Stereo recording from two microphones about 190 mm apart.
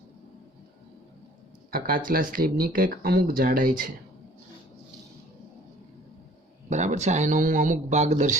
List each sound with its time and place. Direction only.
1.7 s speech: 50° right (ahead or behind)
6.7 s speech: 35° right (ahead or behind)